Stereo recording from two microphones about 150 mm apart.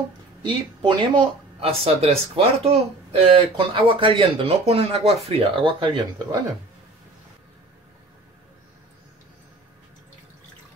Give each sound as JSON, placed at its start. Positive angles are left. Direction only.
{"t": 0.4, "sound": "speech", "side_deg": -30}